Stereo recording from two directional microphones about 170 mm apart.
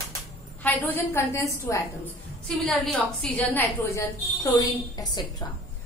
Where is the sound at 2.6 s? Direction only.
Centre (ahead or behind); by 5.4 s 25° left (ahead or behind).